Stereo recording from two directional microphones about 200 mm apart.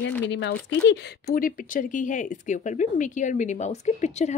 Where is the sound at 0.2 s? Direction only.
60° left (ahead or behind).